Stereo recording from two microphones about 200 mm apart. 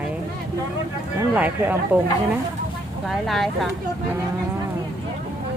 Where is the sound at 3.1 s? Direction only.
Centre (ahead or behind).